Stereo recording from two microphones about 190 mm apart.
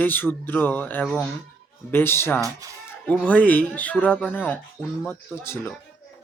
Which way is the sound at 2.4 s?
15° right (ahead or behind).